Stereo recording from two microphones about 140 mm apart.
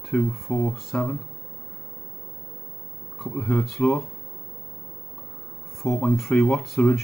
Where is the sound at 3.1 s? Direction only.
Centre (ahead or behind).